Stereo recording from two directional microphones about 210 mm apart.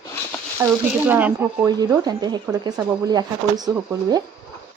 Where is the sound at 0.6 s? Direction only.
10° right (ahead or behind).